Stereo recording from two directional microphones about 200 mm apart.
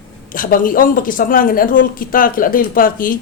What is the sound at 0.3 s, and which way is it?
Speech, 45° left (ahead or behind).